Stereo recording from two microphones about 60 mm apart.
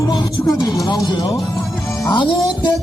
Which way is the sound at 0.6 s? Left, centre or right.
Left.